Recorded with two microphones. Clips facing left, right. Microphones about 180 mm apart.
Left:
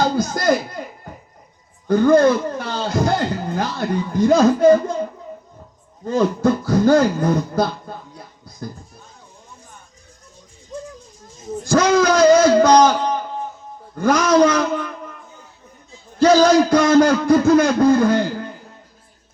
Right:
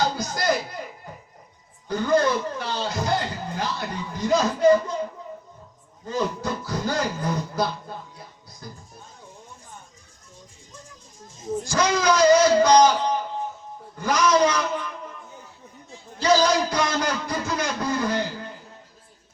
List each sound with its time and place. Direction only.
0.0 s a sound: 50° left (ahead or behind)
1.9 s speech: 50° left (ahead or behind)
6.1 s a man's voice: 50° left (ahead or behind)
11.6 s a man's voice: 50° left (ahead or behind)
16.1 s a man's voice: 50° left (ahead or behind)